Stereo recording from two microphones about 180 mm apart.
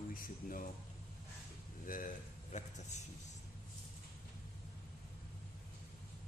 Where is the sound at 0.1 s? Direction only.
50° left (ahead or behind).